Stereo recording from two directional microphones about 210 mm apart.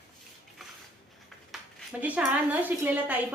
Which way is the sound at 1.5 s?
Centre (ahead or behind).